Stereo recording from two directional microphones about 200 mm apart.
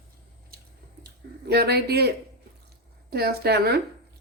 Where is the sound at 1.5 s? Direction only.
55° right (ahead or behind).